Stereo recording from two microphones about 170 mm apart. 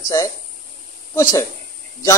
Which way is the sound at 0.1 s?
20° left (ahead or behind).